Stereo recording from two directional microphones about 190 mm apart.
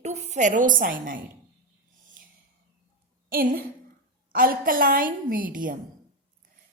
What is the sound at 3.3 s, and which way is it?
A woman's voice, 50° right (ahead or behind).